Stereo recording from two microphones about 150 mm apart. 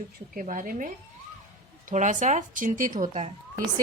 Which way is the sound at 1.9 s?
55° right (ahead or behind).